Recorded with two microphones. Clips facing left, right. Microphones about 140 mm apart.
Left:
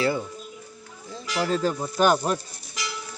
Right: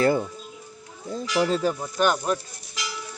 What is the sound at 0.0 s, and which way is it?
Speech, 50° right (ahead or behind).